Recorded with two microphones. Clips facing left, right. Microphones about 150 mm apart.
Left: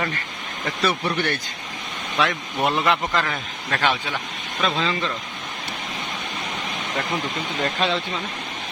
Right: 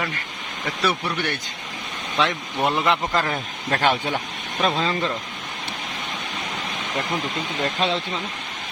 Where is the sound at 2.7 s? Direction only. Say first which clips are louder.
Even; 15° right (ahead or behind).